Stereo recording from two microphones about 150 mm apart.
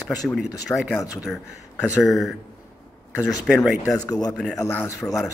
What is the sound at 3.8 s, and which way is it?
Speech, 25° left (ahead or behind).